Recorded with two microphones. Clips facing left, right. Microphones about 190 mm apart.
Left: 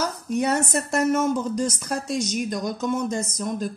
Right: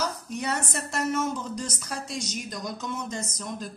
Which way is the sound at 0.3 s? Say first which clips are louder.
Left 8 dB; 45° left (ahead or behind).